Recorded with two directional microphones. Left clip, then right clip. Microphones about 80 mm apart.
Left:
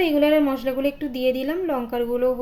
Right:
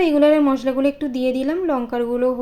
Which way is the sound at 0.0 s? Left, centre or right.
Right.